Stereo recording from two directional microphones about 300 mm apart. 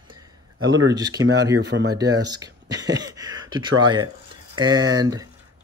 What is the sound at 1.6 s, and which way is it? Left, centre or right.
Speech, right.